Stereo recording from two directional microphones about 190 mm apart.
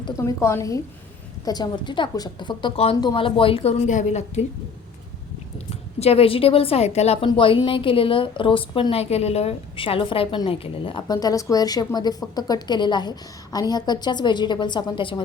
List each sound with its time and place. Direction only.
0.2 s a woman's voice: 15° left (ahead or behind); by 4.4 s 35° left (ahead or behind)
6.0 s a woman's voice: 30° left (ahead or behind)